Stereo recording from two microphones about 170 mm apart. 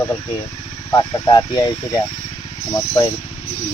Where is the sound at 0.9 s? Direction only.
20° left (ahead or behind).